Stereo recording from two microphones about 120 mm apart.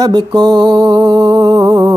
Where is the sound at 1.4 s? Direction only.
30° right (ahead or behind).